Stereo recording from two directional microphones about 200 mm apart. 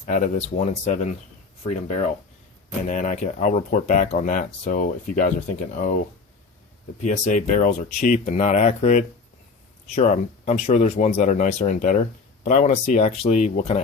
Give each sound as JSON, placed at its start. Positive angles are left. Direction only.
{"t": 0.0, "sound": "speech", "side_deg": 35}
{"t": 2.9, "sound": "speech", "side_deg": 40}
{"t": 7.0, "sound": "speech", "side_deg": 40}